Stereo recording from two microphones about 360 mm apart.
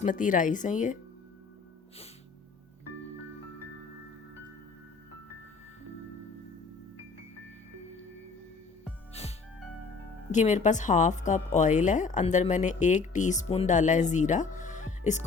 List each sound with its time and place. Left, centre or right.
0.0 s speech: left
9.2 s music: centre
10.3 s speech: centre